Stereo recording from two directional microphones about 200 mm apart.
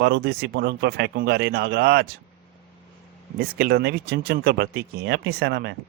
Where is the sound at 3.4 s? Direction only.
50° right (ahead or behind).